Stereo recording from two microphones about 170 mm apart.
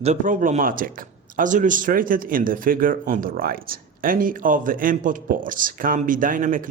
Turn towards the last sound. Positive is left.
turn(degrees=-50)  # may be behind; listen again after turning